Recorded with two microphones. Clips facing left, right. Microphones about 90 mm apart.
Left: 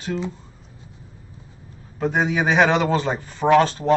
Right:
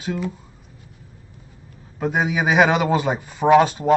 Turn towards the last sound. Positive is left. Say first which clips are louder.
# right 2 dB
turn(degrees=-10)  # may be behind; listen again after turning